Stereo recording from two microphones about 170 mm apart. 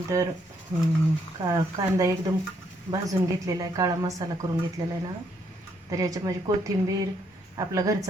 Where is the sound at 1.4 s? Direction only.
20° right (ahead or behind).